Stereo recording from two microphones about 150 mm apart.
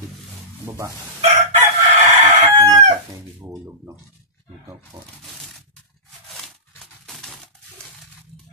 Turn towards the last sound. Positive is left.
turn(degrees=0)  # may be behind; listen again after turning